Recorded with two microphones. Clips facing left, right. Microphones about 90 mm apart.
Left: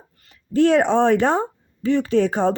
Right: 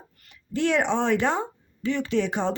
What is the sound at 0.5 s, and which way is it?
Speech, 40° left (ahead or behind).